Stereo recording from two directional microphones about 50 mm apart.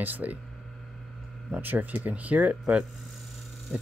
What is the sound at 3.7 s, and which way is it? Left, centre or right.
Speech, right.